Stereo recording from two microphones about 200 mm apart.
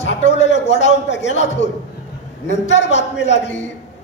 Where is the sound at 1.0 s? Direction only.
65° left (ahead or behind).